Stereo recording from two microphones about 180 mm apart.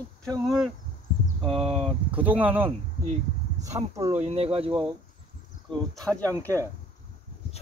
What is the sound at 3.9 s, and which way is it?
Speech, 15° right (ahead or behind).